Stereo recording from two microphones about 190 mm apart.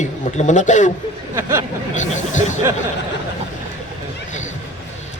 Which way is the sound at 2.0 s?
40° left (ahead or behind).